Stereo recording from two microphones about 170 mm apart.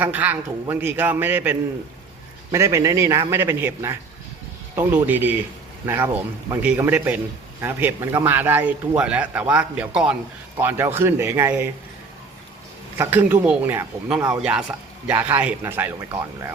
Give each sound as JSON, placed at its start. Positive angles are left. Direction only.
{"t": 0.0, "sound": "speech", "side_deg": -10}
{"t": 13.0, "sound": "speech", "side_deg": -10}